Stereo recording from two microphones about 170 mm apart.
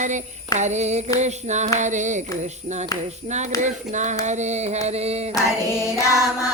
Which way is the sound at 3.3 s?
45° right (ahead or behind).